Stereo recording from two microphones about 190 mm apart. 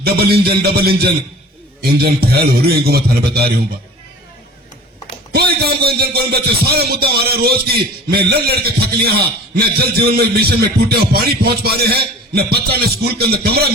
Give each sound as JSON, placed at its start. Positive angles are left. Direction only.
{"t": 0.0, "sound": "music", "side_deg": -55}
{"t": 5.3, "sound": "music", "side_deg": -55}